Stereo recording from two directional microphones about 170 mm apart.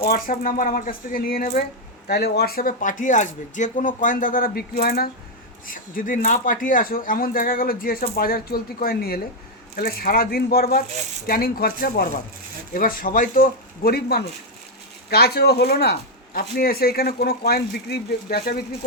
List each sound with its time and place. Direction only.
0.0 s speech: 55° left (ahead or behind)
2.0 s speech: 70° left (ahead or behind)